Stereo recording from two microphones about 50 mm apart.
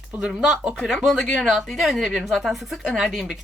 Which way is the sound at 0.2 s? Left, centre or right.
Centre.